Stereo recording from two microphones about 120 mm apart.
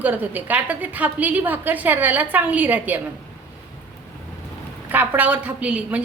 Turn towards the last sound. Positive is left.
turn(degrees=-10)  # may be behind; listen again after turning